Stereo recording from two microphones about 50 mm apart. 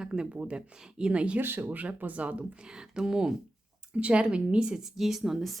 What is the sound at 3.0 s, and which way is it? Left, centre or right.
A woman's voice, centre.